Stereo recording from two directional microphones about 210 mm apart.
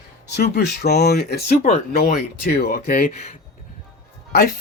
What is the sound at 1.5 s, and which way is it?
Speech, 30° left (ahead or behind).